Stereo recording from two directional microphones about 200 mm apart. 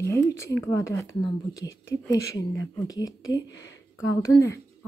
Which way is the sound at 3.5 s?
65° left (ahead or behind).